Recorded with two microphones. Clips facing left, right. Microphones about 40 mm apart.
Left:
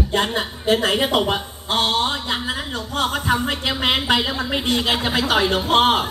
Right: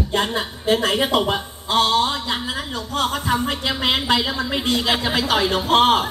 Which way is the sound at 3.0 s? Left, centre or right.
Centre.